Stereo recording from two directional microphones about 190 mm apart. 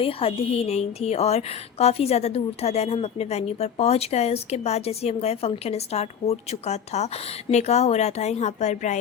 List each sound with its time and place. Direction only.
0.0 s a woman's voice: 30° left (ahead or behind)